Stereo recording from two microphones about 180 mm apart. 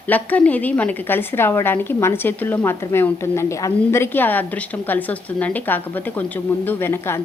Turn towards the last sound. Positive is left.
turn(degrees=15)  # may be behind; listen again after turning